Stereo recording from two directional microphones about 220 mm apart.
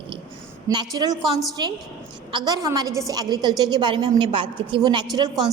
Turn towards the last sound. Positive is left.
turn(degrees=-20)  # may be behind; listen again after turning